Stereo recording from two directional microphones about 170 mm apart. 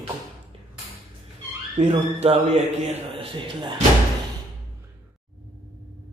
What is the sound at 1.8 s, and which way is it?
A man's voice, 45° right (ahead or behind).